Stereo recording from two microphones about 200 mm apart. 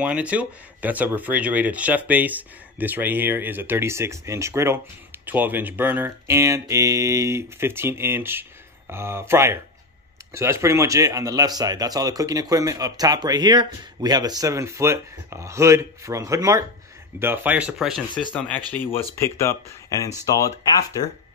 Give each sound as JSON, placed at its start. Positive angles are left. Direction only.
{"t": 0.0, "sound": "speech", "side_deg": -5}
{"t": 18.7, "sound": "speech", "side_deg": 10}